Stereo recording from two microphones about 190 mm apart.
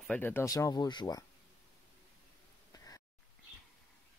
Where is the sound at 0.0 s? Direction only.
10° left (ahead or behind).